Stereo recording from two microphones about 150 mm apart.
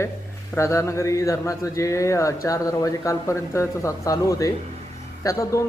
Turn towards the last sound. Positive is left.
turn(degrees=20)  # may be behind; listen again after turning